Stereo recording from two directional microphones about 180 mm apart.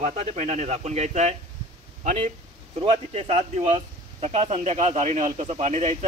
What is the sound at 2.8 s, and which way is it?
Speech, 30° right (ahead or behind).